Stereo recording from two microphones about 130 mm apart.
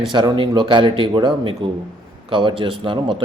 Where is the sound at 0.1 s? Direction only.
35° right (ahead or behind).